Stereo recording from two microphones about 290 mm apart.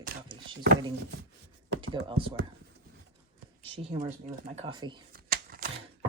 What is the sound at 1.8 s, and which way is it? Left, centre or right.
Speech, centre.